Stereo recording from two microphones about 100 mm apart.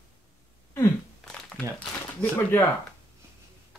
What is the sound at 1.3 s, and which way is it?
Crumpling, 5° left (ahead or behind).